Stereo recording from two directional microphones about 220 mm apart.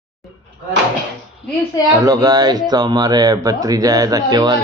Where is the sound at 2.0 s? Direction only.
15° right (ahead or behind).